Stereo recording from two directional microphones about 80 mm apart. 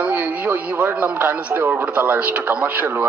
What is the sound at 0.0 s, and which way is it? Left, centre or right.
A man's voice, right.